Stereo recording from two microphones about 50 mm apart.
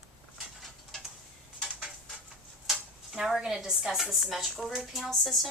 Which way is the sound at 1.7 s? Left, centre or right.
Right.